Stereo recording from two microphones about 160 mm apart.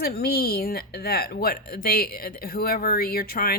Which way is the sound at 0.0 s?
75° left (ahead or behind).